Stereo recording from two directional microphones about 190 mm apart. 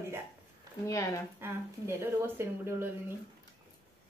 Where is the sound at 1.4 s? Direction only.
15° right (ahead or behind).